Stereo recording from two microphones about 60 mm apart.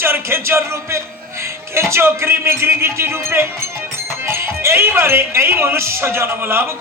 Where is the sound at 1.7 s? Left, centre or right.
Right.